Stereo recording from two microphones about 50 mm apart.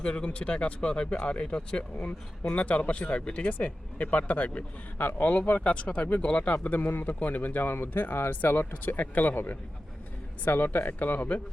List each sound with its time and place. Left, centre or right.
0.0 s speech: left
4.9 s speech: left
5.2 s speech: left
6.5 s speech: left
7.7 s speech: left